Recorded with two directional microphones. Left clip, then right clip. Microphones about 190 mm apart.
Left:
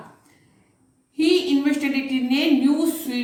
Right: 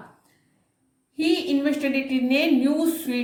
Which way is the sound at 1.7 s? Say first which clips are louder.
Left 1 dB; 50° right (ahead or behind).